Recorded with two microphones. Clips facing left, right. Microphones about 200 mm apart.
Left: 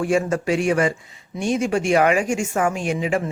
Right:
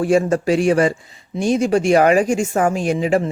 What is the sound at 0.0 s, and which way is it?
Speech, 35° right (ahead or behind).